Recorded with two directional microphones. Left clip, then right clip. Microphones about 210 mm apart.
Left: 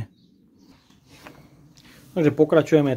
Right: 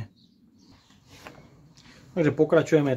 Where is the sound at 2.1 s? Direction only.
35° left (ahead or behind).